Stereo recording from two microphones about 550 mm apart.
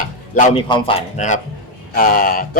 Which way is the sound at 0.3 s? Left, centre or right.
Centre.